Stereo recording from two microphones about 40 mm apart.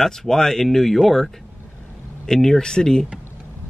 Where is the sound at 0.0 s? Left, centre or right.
Centre.